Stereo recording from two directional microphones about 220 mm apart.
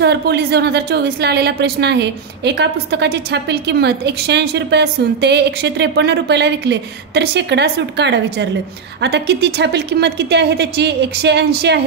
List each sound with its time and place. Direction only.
0.0 s a woman's voice: 50° right (ahead or behind)